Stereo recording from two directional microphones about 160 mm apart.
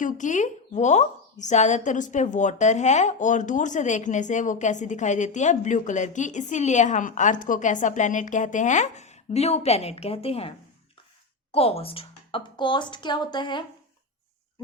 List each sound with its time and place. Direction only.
0.0 s a woman's voice: 50° left (ahead or behind)
11.5 s speech: 40° left (ahead or behind)